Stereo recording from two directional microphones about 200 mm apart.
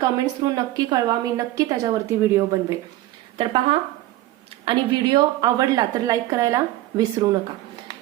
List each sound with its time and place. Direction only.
0.0 s a woman's voice: 20° right (ahead or behind)
3.3 s a woman's voice: 25° right (ahead or behind)